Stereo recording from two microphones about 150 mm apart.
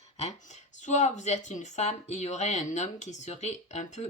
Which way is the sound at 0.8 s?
50° left (ahead or behind).